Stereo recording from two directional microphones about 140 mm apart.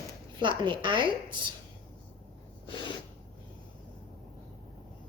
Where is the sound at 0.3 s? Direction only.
35° right (ahead or behind).